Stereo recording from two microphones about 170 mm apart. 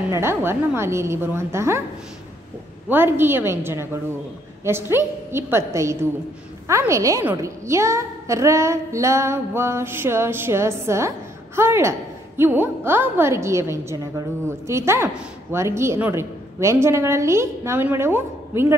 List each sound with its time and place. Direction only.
0.1 s a woman's voice: 15° right (ahead or behind)
2.9 s a woman's voice: 10° right (ahead or behind)